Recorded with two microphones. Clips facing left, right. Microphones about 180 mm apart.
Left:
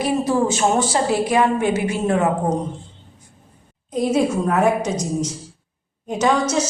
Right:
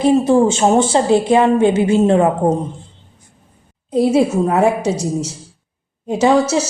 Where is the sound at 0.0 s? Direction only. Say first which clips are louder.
Right 7 dB; 25° right (ahead or behind).